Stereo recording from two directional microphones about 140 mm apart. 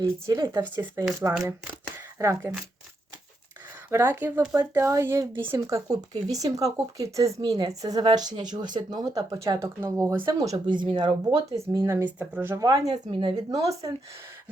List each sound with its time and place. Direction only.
0.0 s speech: 20° right (ahead or behind)
3.8 s speech: 15° right (ahead or behind)
10.7 s speech: 35° right (ahead or behind); by 12.6 s 15° right (ahead or behind)
12.6 s speech: 25° right (ahead or behind)